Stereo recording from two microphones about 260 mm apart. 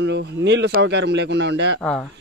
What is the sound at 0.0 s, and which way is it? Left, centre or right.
Speech, right.